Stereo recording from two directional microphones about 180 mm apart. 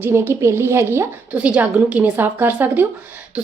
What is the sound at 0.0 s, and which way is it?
A woman's voice, 15° right (ahead or behind).